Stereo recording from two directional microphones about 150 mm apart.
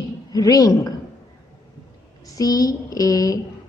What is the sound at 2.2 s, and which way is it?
A woman's voice, 25° left (ahead or behind).